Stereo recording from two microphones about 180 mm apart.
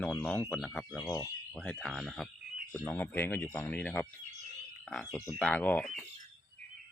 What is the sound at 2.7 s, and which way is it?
Speech, 10° left (ahead or behind).